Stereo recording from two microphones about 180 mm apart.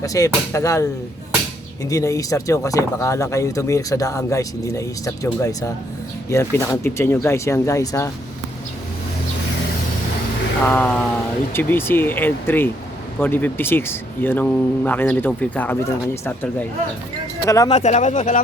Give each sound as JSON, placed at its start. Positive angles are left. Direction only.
{"t": 0.0, "sound": "speech", "side_deg": 20}
{"t": 10.7, "sound": "speech", "side_deg": 5}
{"t": 17.7, "sound": "speech", "side_deg": 40}